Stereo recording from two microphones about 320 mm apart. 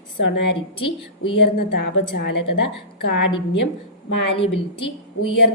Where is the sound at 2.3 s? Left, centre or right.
Left.